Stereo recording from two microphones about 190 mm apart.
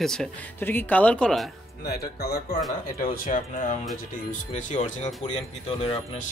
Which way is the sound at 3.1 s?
45° left (ahead or behind).